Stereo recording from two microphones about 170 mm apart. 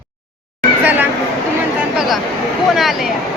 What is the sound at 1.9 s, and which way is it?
Chatter, centre (ahead or behind).